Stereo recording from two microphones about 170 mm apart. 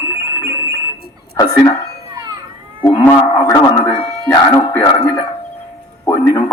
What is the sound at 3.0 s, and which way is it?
Speech, 20° left (ahead or behind).